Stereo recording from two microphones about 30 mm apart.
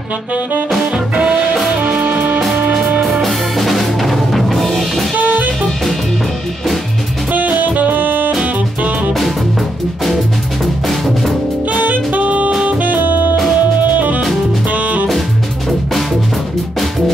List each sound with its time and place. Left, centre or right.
1.8 s music: right
2.0 s music: right
3.0 s drum kit: centre
5.1 s music: right
7.3 s saxophone: right
10.6 s music: centre
11.7 s saxophone: right
12.6 s music: right
13.6 s music: right